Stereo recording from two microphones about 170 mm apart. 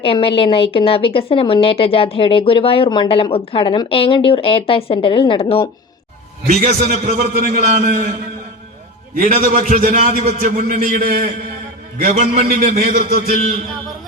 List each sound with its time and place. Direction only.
0.0 s a woman's voice: 30° left (ahead or behind)
6.5 s a man's voice: 50° right (ahead or behind)
9.1 s a man's voice: 55° right (ahead or behind)